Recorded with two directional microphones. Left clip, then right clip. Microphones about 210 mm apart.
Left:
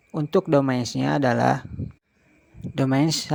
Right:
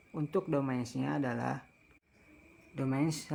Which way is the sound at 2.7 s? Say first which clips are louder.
Left 12 dB; 40° left (ahead or behind).